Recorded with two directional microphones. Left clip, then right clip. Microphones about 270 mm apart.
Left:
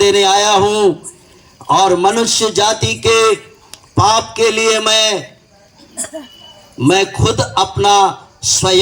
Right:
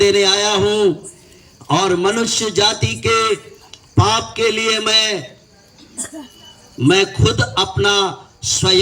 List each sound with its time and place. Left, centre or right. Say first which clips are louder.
0.0 s a sound: left 3 dB; left
1.6 s a man's voice: left 5 dB; left
6.7 s a man's voice: left 2 dB; left